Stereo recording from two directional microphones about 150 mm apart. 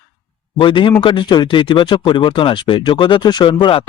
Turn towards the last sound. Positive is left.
turn(degrees=35)  # may be behind; listen again after turning